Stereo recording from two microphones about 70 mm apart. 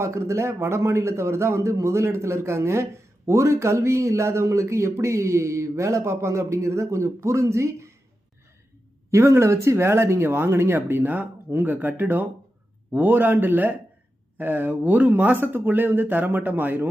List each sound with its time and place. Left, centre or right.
0.0 s a man's voice: right
9.1 s speech: right